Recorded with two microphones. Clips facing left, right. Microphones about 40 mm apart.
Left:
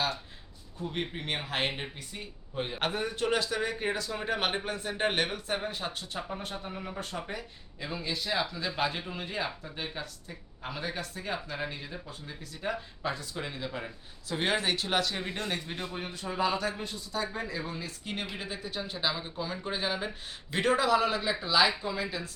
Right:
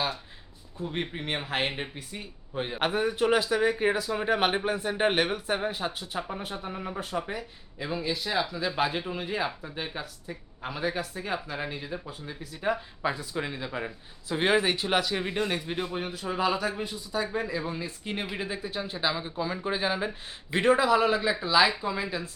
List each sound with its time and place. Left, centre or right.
0.9 s speech: centre